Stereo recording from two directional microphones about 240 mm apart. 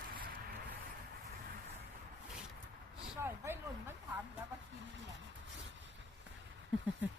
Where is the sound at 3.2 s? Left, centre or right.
Centre.